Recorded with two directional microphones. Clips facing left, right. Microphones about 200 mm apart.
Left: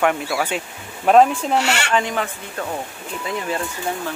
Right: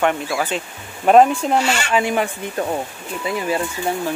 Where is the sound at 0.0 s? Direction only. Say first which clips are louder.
Even; centre (ahead or behind).